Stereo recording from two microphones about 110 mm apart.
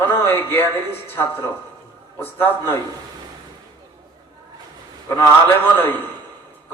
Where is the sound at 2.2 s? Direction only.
20° left (ahead or behind).